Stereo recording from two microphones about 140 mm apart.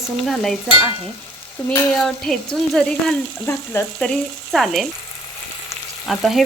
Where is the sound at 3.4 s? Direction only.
20° left (ahead or behind).